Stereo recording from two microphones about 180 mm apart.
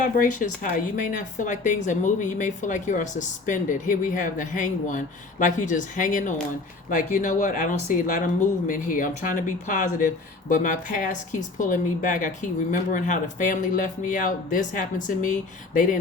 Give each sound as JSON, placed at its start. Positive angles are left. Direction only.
{"t": 0.0, "sound": "a woman's voice", "side_deg": 45}